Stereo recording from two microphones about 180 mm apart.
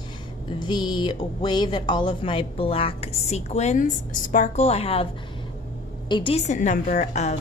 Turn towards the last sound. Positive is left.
turn(degrees=40)  # may be behind; listen again after turning